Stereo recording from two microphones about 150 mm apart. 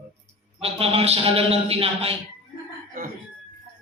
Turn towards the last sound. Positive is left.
turn(degrees=-70)  # may be behind; listen again after turning